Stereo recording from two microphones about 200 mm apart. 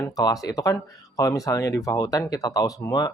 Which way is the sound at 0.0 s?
20° left (ahead or behind).